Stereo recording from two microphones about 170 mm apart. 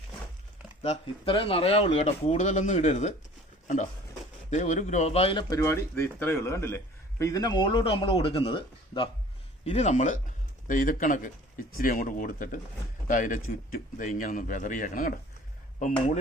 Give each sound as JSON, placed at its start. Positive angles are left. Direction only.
{"t": 0.8, "sound": "speech", "side_deg": 35}
{"t": 4.5, "sound": "a man's voice", "side_deg": 45}